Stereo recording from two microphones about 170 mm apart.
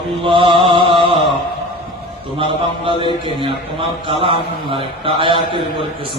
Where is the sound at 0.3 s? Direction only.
30° right (ahead or behind).